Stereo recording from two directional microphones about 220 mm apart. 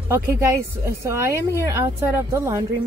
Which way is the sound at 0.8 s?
10° right (ahead or behind).